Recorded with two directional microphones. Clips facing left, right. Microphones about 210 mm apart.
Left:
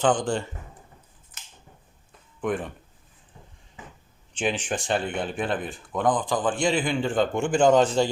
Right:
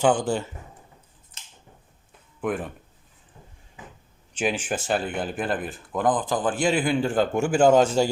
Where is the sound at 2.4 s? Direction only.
5° right (ahead or behind).